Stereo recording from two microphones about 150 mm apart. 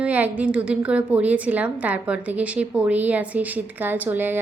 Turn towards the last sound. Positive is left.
turn(degrees=-15)  # may be behind; listen again after turning